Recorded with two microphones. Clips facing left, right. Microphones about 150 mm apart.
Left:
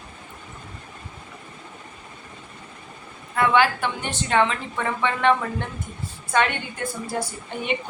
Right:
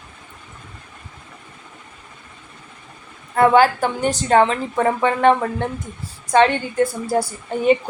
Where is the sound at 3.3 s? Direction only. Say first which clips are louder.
Right 6 dB; 40° right (ahead or behind).